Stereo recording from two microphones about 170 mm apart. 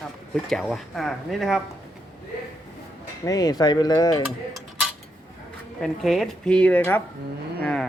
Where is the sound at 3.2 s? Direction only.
20° left (ahead or behind).